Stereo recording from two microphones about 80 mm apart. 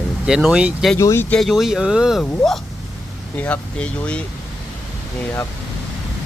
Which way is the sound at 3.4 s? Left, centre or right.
Centre.